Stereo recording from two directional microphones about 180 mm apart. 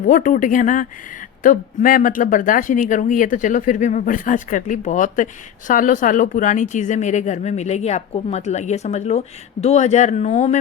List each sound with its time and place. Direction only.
0.0 s speech: 45° left (ahead or behind)